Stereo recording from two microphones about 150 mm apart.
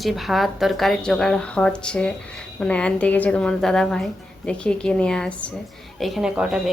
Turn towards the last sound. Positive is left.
turn(degrees=-5)  # may be behind; listen again after turning